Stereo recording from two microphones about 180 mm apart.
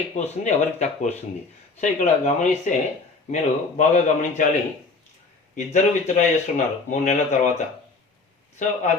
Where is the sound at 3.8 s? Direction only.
45° left (ahead or behind).